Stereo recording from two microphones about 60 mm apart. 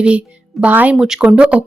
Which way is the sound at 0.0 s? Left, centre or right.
Right.